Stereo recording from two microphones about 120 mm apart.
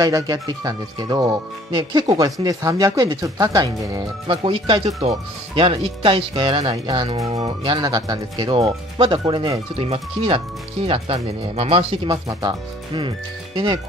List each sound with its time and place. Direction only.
0.0 s speech: 30° right (ahead or behind)
4.5 s speech: 45° right (ahead or behind)
7.2 s speech: 60° right (ahead or behind)
7.7 s speech: 35° right (ahead or behind)
8.5 s speech: 50° right (ahead or behind)
9.2 s speech: 35° right (ahead or behind)
9.8 s speech: 60° right (ahead or behind)
11.5 s speech: 55° right (ahead or behind)
12.1 s speech: 35° right (ahead or behind)